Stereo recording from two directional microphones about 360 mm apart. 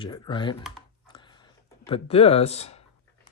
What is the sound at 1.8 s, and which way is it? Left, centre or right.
Speech, centre.